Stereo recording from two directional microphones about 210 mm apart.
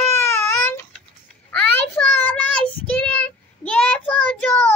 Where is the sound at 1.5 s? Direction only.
5° left (ahead or behind).